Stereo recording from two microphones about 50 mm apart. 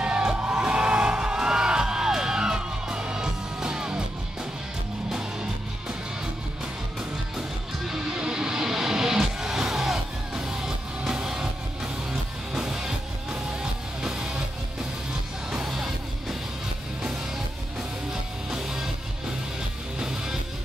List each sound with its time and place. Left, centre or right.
0.0 s music: centre
7.0 s music: centre
18.5 s music: centre
20.0 s music: centre